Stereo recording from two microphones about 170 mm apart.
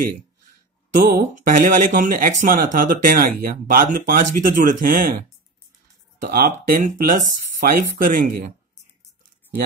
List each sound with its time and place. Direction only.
0.9 s speech: 50° right (ahead or behind)
6.2 s speech: 60° right (ahead or behind)